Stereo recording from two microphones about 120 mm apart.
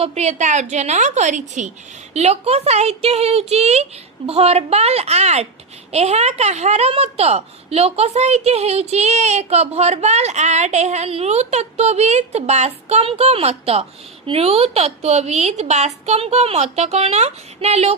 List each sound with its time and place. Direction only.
0.0 s a woman's voice: 65° right (ahead or behind); by 1.7 s 90° right
2.1 s a woman's voice: 60° right (ahead or behind)